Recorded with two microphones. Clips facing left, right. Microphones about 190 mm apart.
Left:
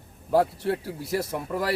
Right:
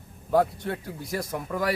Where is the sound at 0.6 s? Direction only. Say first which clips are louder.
Left 5 dB; 30° left (ahead or behind).